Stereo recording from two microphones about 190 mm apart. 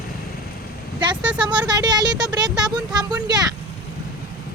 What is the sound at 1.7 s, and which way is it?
Speech, 20° right (ahead or behind).